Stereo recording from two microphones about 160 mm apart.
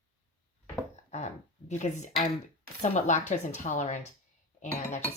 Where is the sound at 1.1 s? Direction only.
45° left (ahead or behind).